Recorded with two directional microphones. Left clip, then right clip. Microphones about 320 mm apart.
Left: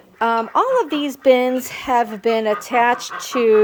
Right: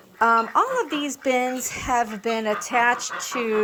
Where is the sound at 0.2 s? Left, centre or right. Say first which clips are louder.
Left 1 dB; centre.